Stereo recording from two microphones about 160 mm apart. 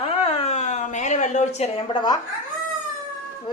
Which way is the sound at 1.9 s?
25° left (ahead or behind).